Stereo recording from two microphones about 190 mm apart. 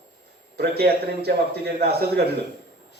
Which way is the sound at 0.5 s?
55° right (ahead or behind).